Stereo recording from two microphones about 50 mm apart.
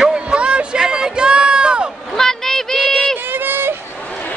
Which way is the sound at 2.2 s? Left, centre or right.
Centre.